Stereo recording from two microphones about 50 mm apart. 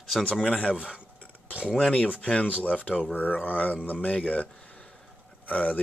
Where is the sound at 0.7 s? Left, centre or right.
Centre.